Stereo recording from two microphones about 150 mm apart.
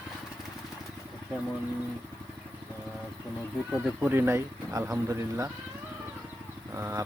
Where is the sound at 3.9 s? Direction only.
15° right (ahead or behind).